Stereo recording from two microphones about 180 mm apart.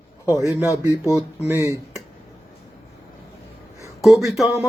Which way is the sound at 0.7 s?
15° left (ahead or behind).